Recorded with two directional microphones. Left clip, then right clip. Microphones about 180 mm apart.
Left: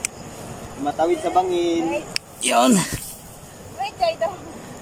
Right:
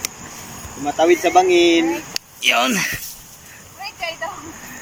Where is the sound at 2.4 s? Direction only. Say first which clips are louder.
Right 1 dB; 25° left (ahead or behind).